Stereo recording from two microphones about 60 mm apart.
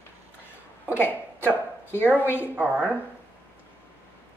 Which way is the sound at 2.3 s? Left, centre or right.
Right.